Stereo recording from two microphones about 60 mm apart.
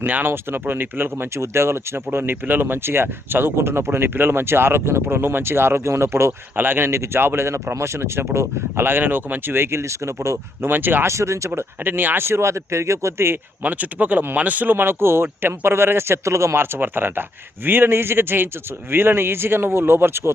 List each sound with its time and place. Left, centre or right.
0.0 s speech: right
2.3 s speech: right
11.0 s speech: right
11.9 s speech: right
13.6 s speech: right